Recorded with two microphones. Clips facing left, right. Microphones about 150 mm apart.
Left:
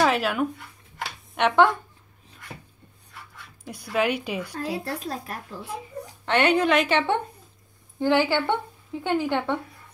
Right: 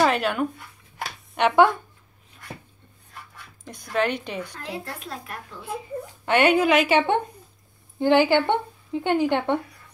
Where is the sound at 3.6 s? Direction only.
10° left (ahead or behind).